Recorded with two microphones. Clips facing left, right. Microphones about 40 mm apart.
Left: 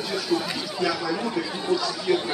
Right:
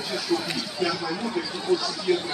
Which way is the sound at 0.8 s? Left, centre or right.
Centre.